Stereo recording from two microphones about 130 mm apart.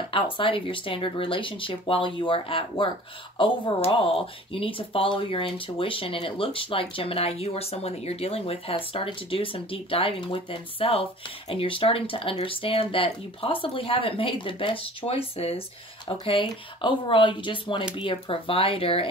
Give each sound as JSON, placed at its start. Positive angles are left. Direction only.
{"t": 0.1, "sound": "speech", "side_deg": 40}